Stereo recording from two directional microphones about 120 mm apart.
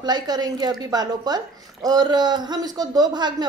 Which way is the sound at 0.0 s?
35° right (ahead or behind).